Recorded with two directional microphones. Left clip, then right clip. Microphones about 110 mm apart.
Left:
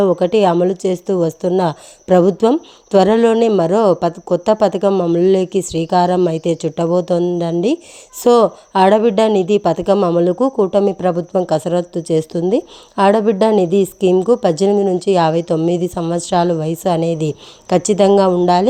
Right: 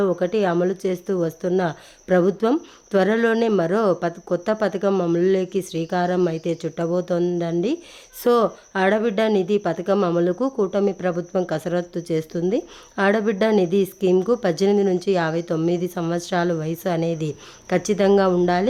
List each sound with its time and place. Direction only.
0.2 s a woman's voice: 45° left (ahead or behind)
4.9 s a woman's voice: 25° left (ahead or behind)
5.2 s a woman's voice: 40° left (ahead or behind)